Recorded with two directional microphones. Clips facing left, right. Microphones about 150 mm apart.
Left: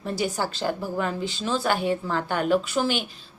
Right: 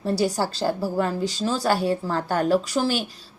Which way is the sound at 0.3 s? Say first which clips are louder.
Right 3 dB; 35° right (ahead or behind).